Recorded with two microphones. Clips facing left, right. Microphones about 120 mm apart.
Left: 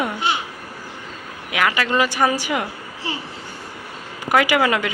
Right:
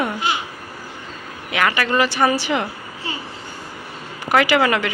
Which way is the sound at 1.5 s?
10° left (ahead or behind).